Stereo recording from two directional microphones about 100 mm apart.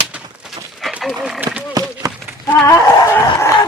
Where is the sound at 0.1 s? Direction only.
10° right (ahead or behind).